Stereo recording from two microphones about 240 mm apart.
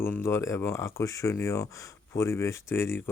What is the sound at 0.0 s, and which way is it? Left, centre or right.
Speech, centre.